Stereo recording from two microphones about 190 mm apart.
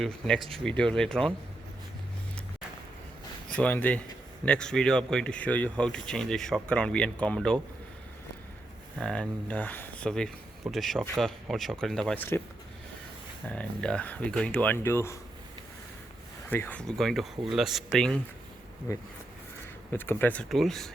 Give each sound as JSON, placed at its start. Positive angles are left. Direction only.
{"t": 0.0, "sound": "speech", "side_deg": 0}
{"t": 3.5, "sound": "speech", "side_deg": 10}
{"t": 9.0, "sound": "speech", "side_deg": 5}
{"t": 13.5, "sound": "speech", "side_deg": 5}
{"t": 16.5, "sound": "speech", "side_deg": 10}
{"t": 18.9, "sound": "speech", "side_deg": 15}